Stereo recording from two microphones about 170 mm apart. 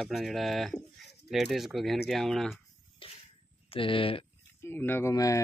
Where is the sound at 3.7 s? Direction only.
30° left (ahead or behind).